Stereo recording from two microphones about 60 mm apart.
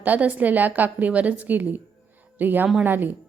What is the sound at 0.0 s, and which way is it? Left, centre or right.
A woman's voice, right.